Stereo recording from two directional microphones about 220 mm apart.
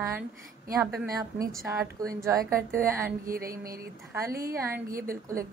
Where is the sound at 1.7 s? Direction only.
15° right (ahead or behind).